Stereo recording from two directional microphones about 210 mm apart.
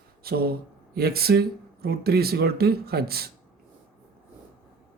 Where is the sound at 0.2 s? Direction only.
45° right (ahead or behind).